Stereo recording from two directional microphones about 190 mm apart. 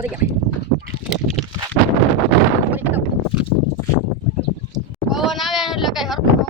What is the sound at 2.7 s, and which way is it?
Clip-clop, 10° right (ahead or behind).